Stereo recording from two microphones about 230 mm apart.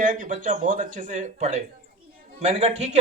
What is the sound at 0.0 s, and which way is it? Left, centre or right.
A man's voice, right.